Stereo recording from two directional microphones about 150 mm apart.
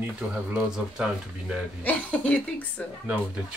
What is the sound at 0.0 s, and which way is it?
Speech, 10° right (ahead or behind).